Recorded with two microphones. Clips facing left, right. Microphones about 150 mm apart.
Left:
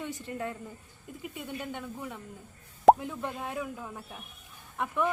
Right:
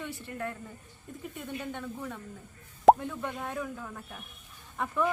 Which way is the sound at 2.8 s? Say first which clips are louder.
Even; centre (ahead or behind).